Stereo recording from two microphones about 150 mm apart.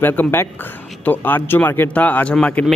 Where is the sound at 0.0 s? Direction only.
15° left (ahead or behind).